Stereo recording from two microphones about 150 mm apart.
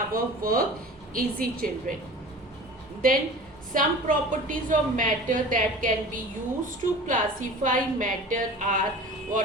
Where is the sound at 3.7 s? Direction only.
60° right (ahead or behind).